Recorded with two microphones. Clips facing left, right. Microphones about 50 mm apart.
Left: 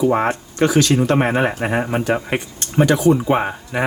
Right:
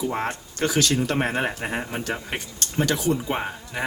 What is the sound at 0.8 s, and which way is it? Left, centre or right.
Speech, left.